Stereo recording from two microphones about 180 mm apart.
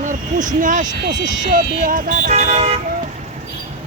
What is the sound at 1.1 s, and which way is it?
Speech, 20° right (ahead or behind).